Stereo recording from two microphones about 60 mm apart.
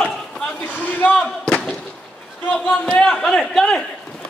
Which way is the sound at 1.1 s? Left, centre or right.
Centre.